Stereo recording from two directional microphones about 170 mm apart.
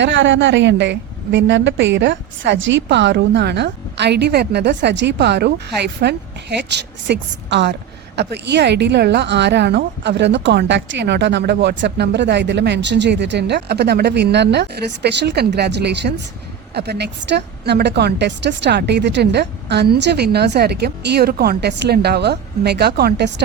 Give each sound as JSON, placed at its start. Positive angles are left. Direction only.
{"t": 0.0, "sound": "a woman's voice", "side_deg": -90}
{"t": 6.7, "sound": "a woman's voice", "side_deg": -90}
{"t": 16.7, "sound": "a woman's voice", "side_deg": -75}